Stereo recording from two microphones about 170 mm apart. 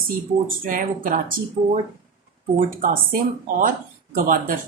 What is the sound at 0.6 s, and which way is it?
Speech, 50° right (ahead or behind).